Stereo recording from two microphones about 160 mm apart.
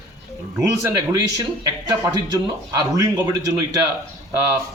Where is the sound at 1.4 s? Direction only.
25° right (ahead or behind).